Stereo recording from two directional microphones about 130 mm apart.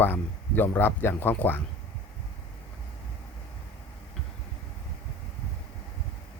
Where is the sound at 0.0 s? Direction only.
15° left (ahead or behind).